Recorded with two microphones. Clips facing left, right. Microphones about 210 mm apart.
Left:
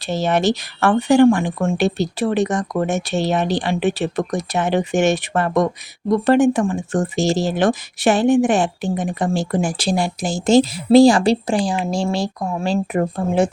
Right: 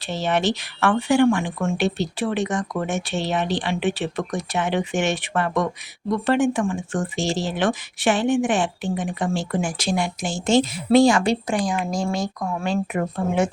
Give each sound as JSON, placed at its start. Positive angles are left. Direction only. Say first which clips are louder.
{"t": 0.1, "sound": "speech", "louder": "left 4 dB", "side_deg": 40}